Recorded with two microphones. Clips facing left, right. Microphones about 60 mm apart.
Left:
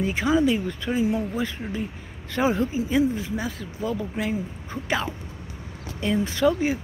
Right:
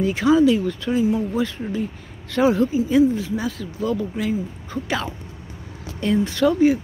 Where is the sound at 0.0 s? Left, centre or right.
Centre.